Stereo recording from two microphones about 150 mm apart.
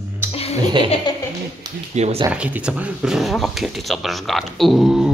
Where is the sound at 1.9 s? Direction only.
45° right (ahead or behind).